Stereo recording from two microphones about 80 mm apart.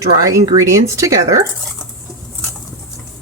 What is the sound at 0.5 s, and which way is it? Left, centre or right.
Speech, right.